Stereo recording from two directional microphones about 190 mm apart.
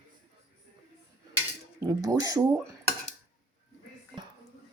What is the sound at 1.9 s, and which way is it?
Speech, 20° right (ahead or behind).